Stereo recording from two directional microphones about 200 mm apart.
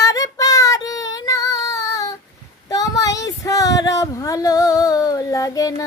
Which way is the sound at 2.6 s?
20° left (ahead or behind).